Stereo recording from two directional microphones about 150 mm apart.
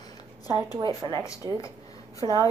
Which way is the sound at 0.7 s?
30° right (ahead or behind).